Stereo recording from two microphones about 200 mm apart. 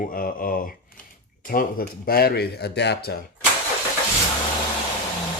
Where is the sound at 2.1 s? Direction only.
50° left (ahead or behind).